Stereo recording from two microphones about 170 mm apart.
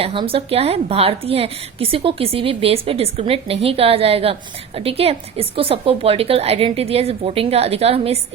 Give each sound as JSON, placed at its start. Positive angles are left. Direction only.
{"t": 0.0, "sound": "a woman's voice", "side_deg": -30}